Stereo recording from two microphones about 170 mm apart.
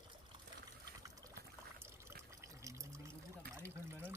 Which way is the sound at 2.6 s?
20° right (ahead or behind).